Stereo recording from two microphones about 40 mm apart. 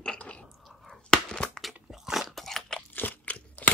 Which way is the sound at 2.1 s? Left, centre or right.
Centre.